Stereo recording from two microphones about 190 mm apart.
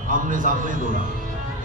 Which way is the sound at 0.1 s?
45° right (ahead or behind).